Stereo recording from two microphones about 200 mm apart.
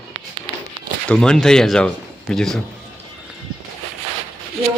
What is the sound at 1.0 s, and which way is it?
Speech, 5° left (ahead or behind).